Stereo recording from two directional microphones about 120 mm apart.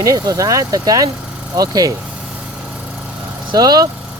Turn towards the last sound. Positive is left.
turn(degrees=-35)  # may be behind; listen again after turning